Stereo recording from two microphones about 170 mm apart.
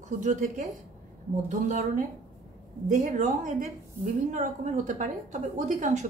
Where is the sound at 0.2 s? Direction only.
45° right (ahead or behind).